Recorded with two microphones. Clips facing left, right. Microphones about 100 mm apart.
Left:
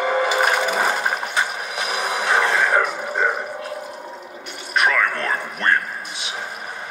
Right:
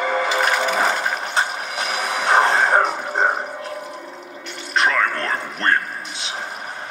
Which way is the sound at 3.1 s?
35° right (ahead or behind).